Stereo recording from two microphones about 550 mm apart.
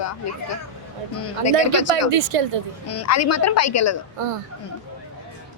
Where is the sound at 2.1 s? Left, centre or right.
Right.